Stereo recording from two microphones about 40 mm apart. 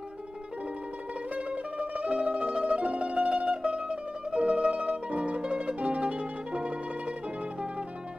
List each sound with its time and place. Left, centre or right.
1.3 s music: right
2.5 s mandolin: right